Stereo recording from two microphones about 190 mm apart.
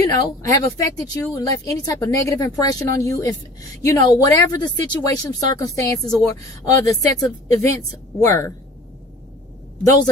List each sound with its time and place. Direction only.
0.0 s speech: 20° left (ahead or behind)